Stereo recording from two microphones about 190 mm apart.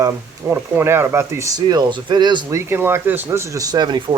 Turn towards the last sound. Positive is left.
turn(degrees=-25)  # may be behind; listen again after turning